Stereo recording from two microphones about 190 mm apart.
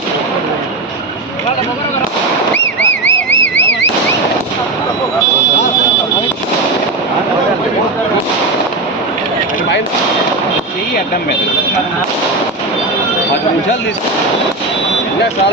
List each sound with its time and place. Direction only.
2.8 s vehicle: 70° left (ahead or behind)